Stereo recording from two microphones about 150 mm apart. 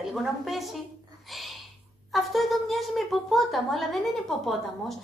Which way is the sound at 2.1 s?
Centre (ahead or behind).